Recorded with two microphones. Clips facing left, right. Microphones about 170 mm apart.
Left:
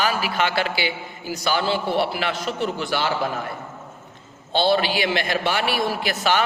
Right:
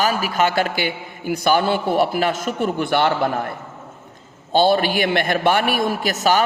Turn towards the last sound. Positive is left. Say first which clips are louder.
# right 4 dB
turn(degrees=-40)  # may be behind; listen again after turning